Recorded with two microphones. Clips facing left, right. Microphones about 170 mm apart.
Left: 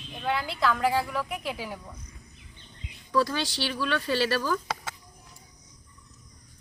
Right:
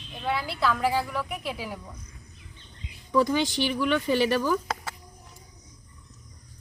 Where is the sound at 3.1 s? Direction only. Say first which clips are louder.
Right 3 dB; 15° right (ahead or behind).